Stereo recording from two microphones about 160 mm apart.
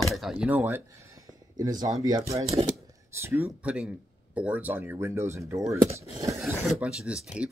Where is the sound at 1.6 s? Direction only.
25° right (ahead or behind).